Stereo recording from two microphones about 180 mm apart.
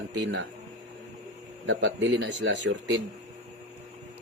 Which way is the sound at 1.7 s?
75° right (ahead or behind).